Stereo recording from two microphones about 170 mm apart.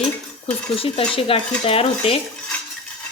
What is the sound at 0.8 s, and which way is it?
A woman's voice, 35° left (ahead or behind).